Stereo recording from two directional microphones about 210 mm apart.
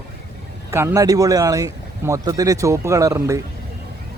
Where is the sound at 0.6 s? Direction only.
10° right (ahead or behind).